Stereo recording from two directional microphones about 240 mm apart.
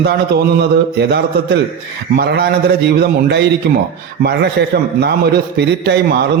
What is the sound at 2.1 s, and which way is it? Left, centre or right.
A man's voice, right.